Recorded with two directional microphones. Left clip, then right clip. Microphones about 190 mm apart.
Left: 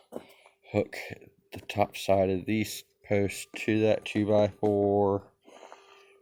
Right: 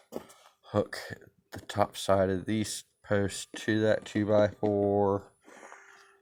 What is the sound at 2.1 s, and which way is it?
Speech, 25° right (ahead or behind).